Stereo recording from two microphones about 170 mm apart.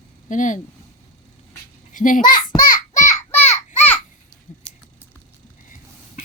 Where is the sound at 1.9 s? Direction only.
50° left (ahead or behind).